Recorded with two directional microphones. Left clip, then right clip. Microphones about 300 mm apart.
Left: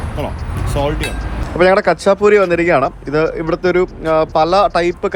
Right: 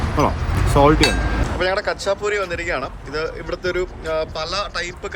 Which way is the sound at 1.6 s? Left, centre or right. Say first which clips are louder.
Left 11 dB; centre.